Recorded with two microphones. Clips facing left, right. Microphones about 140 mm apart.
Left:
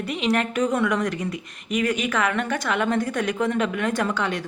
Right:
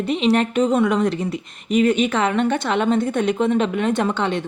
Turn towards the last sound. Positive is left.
turn(degrees=-25)  # may be behind; listen again after turning